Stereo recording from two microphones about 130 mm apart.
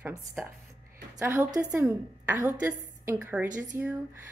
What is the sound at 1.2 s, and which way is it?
Speech, 15° right (ahead or behind).